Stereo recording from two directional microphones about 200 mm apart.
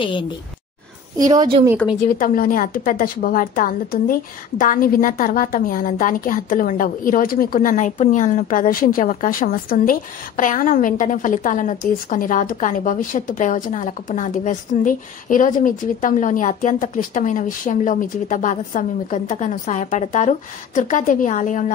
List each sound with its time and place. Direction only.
2.0 s a woman's voice: 45° left (ahead or behind)